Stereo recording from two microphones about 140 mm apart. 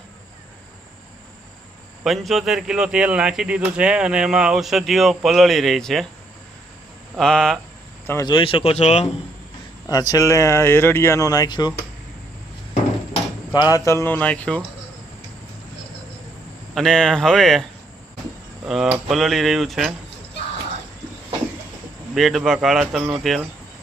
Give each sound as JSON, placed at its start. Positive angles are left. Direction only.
{"t": 2.0, "sound": "speech", "side_deg": 0}
{"t": 7.2, "sound": "speech", "side_deg": 5}
{"t": 8.0, "sound": "speech", "side_deg": 20}
{"t": 8.3, "sound": "speech", "side_deg": 35}
{"t": 9.9, "sound": "speech", "side_deg": 25}
{"t": 13.5, "sound": "speech", "side_deg": 30}
{"t": 16.7, "sound": "speech", "side_deg": 5}
{"t": 18.6, "sound": "cricket", "side_deg": -5}
{"t": 19.0, "sound": "speech", "side_deg": 0}
{"t": 22.1, "sound": "speech", "side_deg": 0}